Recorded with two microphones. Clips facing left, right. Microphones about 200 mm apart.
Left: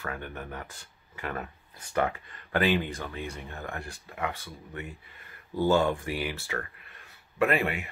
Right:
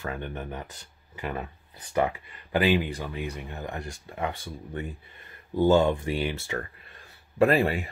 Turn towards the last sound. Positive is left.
turn(degrees=-35)  # may be behind; listen again after turning